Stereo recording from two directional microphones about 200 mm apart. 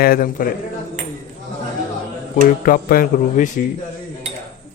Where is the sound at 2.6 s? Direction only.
45° left (ahead or behind).